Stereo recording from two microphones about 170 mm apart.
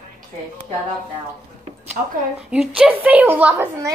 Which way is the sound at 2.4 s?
5° right (ahead or behind).